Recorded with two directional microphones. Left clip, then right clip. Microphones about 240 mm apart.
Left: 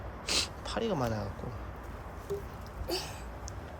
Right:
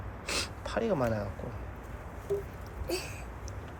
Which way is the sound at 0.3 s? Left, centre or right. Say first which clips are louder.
Left 2 dB; centre.